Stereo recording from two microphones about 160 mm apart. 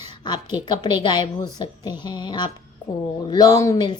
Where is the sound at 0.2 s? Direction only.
25° left (ahead or behind).